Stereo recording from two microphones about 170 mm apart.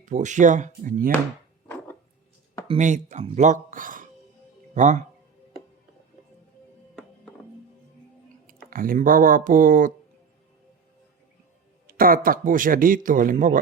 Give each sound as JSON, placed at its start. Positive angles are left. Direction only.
{"t": 0.0, "sound": "speech", "side_deg": -45}
{"t": 1.6, "sound": "a sound", "side_deg": 10}
{"t": 2.6, "sound": "speech", "side_deg": -45}
{"t": 8.7, "sound": "speech", "side_deg": -55}
{"t": 11.9, "sound": "speech", "side_deg": -55}